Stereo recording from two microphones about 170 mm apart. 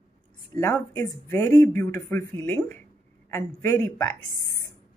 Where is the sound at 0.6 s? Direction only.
15° left (ahead or behind).